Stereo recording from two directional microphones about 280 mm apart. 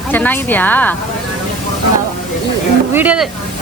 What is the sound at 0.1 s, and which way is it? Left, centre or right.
Speech, centre.